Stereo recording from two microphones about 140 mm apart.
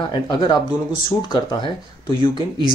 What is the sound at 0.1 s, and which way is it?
Speech, 35° left (ahead or behind).